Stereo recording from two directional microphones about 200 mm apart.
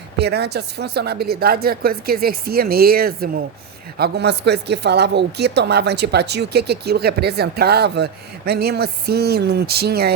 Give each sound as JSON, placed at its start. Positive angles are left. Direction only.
{"t": 0.2, "sound": "a woman's voice", "side_deg": -55}